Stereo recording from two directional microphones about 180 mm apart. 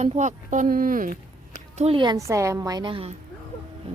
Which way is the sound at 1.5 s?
35° right (ahead or behind).